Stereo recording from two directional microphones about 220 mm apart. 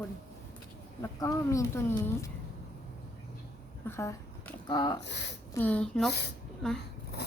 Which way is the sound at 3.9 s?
10° left (ahead or behind).